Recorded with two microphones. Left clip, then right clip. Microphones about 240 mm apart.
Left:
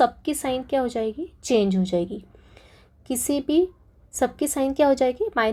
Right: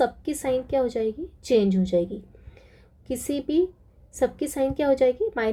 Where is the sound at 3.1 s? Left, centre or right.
Centre.